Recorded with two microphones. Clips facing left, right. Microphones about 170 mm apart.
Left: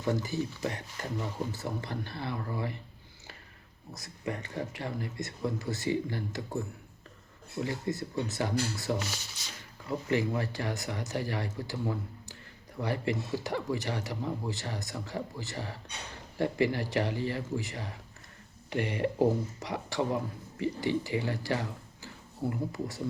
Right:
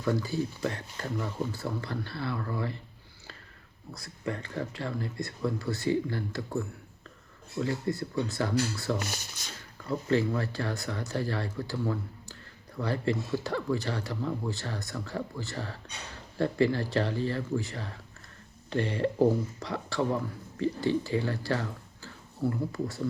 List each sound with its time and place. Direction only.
0.0 s speech: 20° left (ahead or behind)
3.9 s speech: 20° left (ahead or behind)
7.6 s speech: 20° left (ahead or behind)
9.0 s speech: 50° right (ahead or behind)
10.1 s speech: 15° left (ahead or behind)